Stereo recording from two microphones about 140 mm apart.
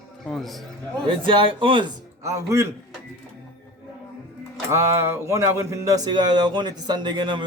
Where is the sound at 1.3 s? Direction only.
35° right (ahead or behind).